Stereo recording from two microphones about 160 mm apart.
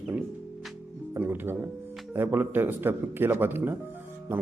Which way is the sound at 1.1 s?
10° right (ahead or behind).